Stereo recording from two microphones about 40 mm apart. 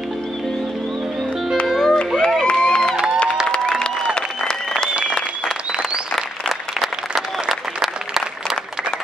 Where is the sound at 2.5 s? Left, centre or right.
Centre.